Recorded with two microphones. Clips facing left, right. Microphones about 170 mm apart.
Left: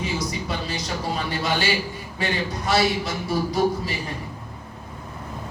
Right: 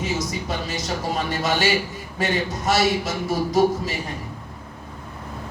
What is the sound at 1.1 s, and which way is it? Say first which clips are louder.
A man's voice: right 2 dB; 45° right (ahead or behind).